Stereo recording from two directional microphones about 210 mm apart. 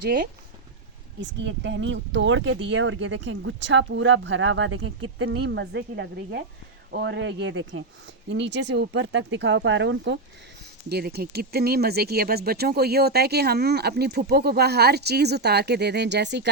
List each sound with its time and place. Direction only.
0.0 s speech: 45° right (ahead or behind)
1.2 s speech: 60° right (ahead or behind)